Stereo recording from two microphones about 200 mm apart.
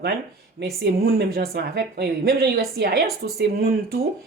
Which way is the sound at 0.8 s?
50° right (ahead or behind).